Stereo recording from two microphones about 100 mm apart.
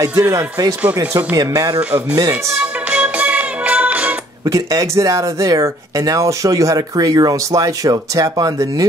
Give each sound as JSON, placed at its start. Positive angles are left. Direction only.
{"t": 0.0, "sound": "speech", "side_deg": -30}
{"t": 1.8, "sound": "speech", "side_deg": -15}
{"t": 2.1, "sound": "speech", "side_deg": -30}
{"t": 2.6, "sound": "music", "side_deg": -15}
{"t": 4.5, "sound": "speech", "side_deg": -35}